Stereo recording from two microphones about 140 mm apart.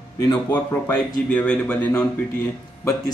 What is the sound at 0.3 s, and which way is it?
Speech, 15° left (ahead or behind).